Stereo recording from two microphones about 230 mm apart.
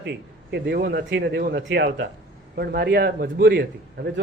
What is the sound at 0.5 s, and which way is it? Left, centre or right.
A man's voice, right.